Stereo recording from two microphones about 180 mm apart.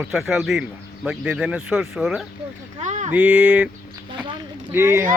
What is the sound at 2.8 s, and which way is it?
Speech, 40° right (ahead or behind).